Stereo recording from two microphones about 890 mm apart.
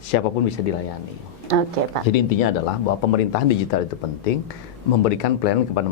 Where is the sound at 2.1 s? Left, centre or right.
Left.